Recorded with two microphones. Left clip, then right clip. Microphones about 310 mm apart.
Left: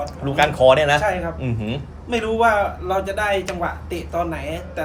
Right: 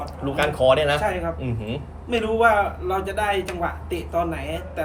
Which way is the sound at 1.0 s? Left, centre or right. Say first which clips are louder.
Left 3 dB; centre.